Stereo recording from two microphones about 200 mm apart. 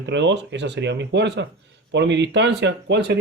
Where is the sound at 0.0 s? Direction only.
65° right (ahead or behind).